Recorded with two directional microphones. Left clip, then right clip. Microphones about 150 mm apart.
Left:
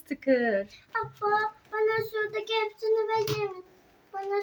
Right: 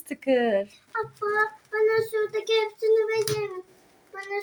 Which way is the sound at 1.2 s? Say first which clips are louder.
Left 2 dB; 10° left (ahead or behind).